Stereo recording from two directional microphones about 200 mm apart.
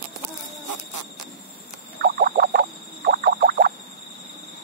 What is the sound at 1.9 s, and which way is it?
Frog, 55° right (ahead or behind).